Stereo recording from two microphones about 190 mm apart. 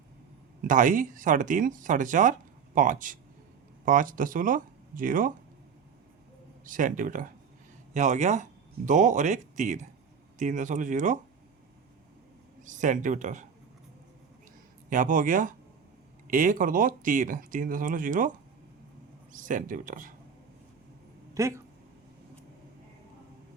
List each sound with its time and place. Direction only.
0.6 s speech: 45° right (ahead or behind)
6.7 s speech: 45° right (ahead or behind)
12.6 s speech: 40° right (ahead or behind)
14.8 s speech: 45° right (ahead or behind)
19.3 s speech: 45° right (ahead or behind)
21.4 s speech: 15° right (ahead or behind)